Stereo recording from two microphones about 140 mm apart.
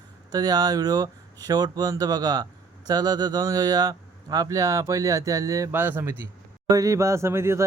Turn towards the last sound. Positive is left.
turn(degrees=-20)  # may be behind; listen again after turning